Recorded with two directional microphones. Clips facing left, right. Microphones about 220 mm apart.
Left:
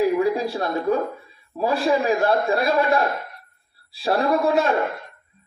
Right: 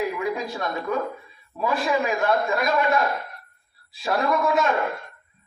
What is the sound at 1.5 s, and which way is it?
Speech, 35° left (ahead or behind).